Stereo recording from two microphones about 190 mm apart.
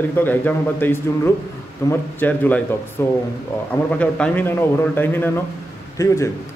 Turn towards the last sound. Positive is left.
turn(degrees=15)  # may be behind; listen again after turning